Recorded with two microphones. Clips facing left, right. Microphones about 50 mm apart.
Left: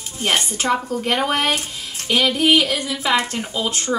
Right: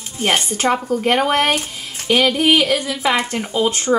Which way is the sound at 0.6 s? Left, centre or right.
Right.